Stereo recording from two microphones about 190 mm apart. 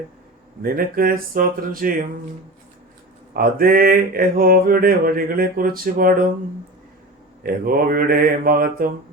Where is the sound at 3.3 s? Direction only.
50° right (ahead or behind).